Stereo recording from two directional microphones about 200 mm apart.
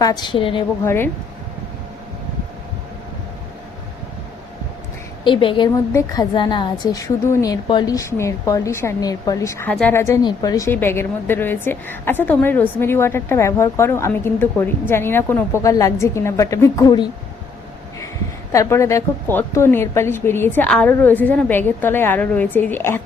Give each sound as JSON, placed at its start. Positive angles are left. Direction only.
{"t": 0.0, "sound": "a woman's voice", "side_deg": 20}
{"t": 0.9, "sound": "a woman's voice", "side_deg": 10}
{"t": 5.2, "sound": "a woman's voice", "side_deg": 25}
{"t": 18.5, "sound": "a woman's voice", "side_deg": 15}